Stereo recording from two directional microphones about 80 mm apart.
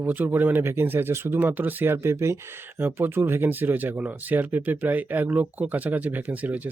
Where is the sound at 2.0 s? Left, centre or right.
Right.